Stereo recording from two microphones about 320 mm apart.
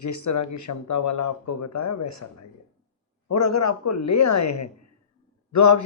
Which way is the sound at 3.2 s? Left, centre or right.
Left.